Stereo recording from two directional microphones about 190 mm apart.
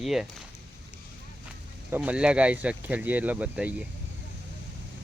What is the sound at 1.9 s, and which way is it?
Speech, 5° right (ahead or behind).